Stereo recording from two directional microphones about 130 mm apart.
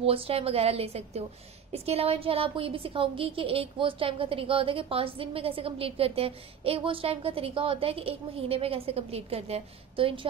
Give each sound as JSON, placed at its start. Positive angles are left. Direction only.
{"t": 0.0, "sound": "a woman's voice", "side_deg": -45}